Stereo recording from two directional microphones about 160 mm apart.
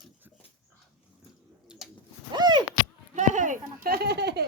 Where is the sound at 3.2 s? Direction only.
50° right (ahead or behind); by 4.4 s 90° right.